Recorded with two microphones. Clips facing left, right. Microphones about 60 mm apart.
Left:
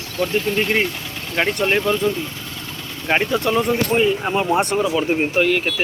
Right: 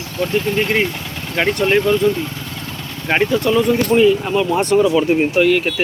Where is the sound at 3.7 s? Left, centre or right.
Left.